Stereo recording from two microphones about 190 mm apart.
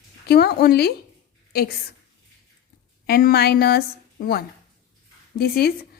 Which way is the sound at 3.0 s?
55° left (ahead or behind).